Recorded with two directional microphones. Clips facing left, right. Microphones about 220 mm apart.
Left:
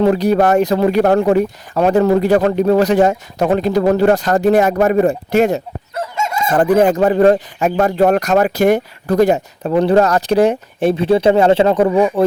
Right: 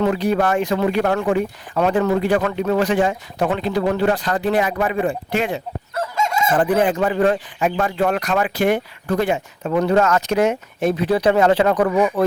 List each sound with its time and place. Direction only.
0.0 s speech: 40° left (ahead or behind)